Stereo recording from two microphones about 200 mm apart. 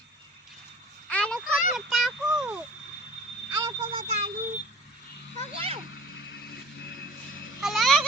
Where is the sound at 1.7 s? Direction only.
Centre (ahead or behind).